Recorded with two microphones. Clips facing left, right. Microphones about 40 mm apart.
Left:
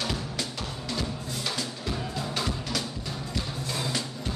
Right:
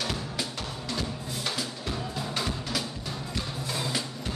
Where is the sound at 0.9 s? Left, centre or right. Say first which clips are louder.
Left 1 dB; centre.